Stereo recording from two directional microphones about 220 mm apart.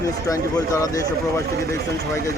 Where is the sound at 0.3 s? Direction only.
15° left (ahead or behind).